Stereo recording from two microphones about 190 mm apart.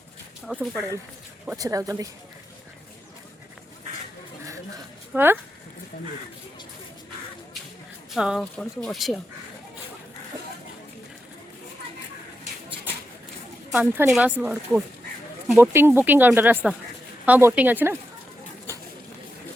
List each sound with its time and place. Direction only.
0.4 s speech: centre (ahead or behind)
1.5 s speech: 15° right (ahead or behind)
5.1 s speech: 10° right (ahead or behind)
8.1 s speech: centre (ahead or behind)
13.7 s a woman's voice: 10° right (ahead or behind)
18.7 s a sound: 15° right (ahead or behind)